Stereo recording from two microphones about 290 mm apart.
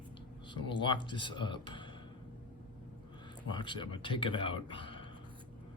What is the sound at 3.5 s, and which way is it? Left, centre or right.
Speech, centre.